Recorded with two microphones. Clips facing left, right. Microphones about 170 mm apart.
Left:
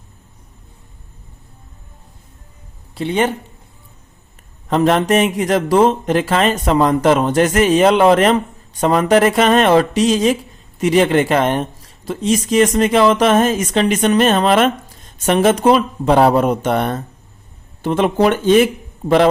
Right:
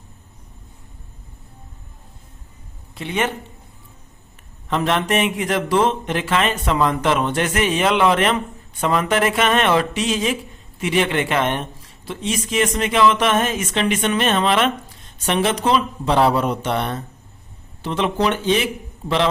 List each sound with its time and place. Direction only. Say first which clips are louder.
2.9 s speech: left 6 dB; 30° left (ahead or behind)
4.7 s speech: left 6 dB; 40° left (ahead or behind)